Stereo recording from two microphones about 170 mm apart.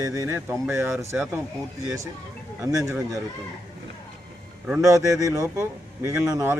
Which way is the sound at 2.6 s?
20° right (ahead or behind).